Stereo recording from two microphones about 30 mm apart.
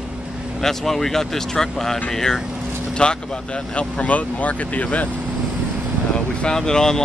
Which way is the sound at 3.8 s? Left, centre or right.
Left.